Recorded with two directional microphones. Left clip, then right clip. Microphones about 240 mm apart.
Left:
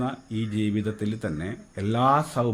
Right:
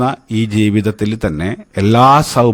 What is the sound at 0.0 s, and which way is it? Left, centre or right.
Speech, right.